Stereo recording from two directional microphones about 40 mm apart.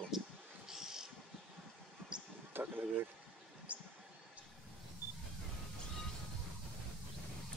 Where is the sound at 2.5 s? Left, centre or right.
Right.